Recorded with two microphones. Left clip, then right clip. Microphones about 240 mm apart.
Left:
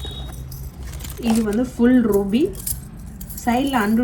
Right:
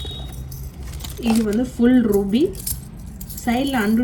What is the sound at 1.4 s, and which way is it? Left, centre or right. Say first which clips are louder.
Speech: even; centre.